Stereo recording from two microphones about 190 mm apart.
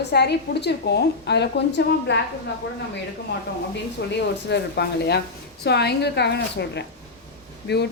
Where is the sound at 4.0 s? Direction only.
60° left (ahead or behind).